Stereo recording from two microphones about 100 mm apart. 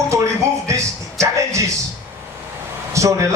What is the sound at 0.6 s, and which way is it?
A man's voice, 30° right (ahead or behind).